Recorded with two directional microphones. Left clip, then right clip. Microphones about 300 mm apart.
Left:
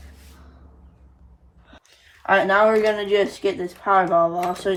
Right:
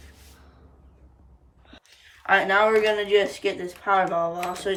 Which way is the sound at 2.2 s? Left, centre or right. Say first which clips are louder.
Left 3 dB; centre.